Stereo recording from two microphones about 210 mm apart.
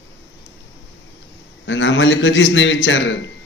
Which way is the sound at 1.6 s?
60° left (ahead or behind).